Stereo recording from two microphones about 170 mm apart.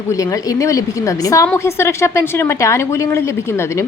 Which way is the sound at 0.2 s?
20° left (ahead or behind).